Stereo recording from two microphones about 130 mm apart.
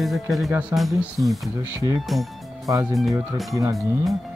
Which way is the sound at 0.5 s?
10° right (ahead or behind).